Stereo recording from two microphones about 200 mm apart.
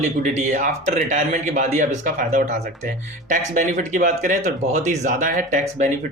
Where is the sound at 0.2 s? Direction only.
40° right (ahead or behind).